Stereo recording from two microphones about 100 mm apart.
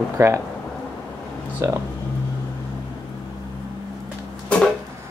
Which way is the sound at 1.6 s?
30° right (ahead or behind).